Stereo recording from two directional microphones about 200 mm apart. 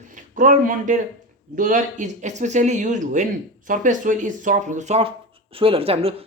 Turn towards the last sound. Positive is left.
turn(degrees=-30)  # may be behind; listen again after turning